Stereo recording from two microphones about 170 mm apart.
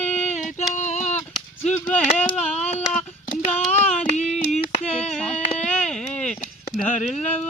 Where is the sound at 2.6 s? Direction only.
40° left (ahead or behind).